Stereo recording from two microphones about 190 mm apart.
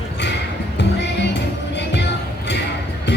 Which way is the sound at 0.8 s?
65° left (ahead or behind).